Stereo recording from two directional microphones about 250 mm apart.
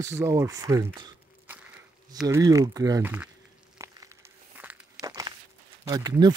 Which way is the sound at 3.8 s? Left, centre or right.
Centre.